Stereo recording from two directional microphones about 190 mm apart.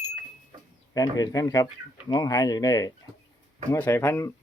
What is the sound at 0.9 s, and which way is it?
Speech, 20° left (ahead or behind).